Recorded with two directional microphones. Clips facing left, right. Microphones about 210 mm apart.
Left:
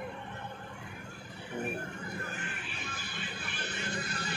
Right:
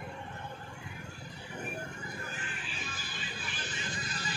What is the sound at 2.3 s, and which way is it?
Music, 60° left (ahead or behind).